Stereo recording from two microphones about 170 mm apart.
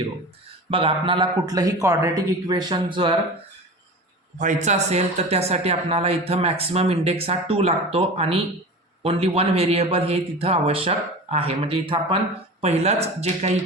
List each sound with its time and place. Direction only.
0.7 s a man's voice: 30° right (ahead or behind)
4.4 s speech: 45° right (ahead or behind)